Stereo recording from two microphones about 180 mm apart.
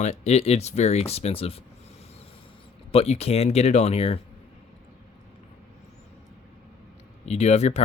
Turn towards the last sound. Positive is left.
turn(degrees=40)  # may be behind; listen again after turning